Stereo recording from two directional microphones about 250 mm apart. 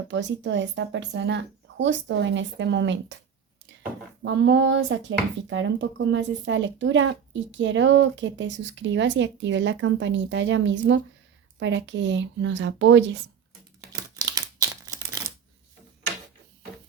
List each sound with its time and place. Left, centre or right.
0.1 s speech: right
4.2 s speech: right
13.9 s a sound: centre